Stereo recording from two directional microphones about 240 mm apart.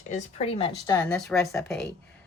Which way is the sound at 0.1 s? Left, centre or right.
Left.